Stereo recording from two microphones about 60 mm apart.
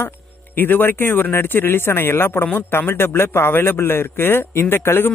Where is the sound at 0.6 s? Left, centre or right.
Left.